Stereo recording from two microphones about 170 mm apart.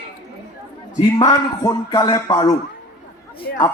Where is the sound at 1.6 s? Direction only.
20° left (ahead or behind).